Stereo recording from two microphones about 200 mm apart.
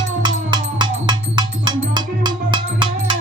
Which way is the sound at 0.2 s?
20° right (ahead or behind).